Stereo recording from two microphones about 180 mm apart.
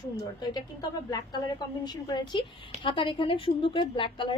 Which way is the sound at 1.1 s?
20° left (ahead or behind).